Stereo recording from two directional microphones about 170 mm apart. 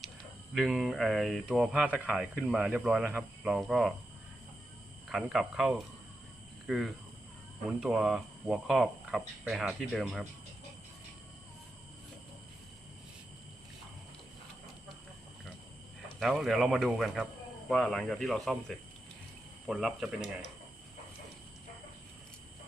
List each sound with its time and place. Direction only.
0.5 s speech: centre (ahead or behind)
5.0 s speech: centre (ahead or behind)
16.2 s speech: centre (ahead or behind)